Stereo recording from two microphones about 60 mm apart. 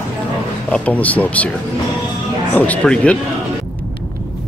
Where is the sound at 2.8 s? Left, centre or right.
Centre.